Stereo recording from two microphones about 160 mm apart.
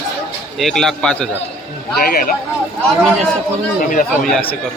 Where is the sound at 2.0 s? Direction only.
65° left (ahead or behind).